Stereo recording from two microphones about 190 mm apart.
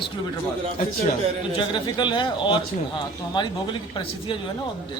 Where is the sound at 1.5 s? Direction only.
25° left (ahead or behind).